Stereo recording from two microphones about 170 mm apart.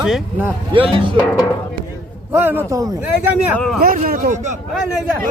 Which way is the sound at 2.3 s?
10° right (ahead or behind).